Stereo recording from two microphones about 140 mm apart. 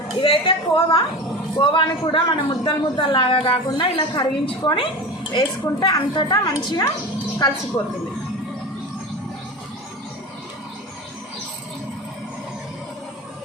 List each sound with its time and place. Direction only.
0.2 s a man's voice: 35° left (ahead or behind)